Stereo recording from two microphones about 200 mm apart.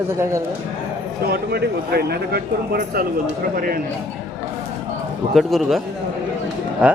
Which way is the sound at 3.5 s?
45° right (ahead or behind).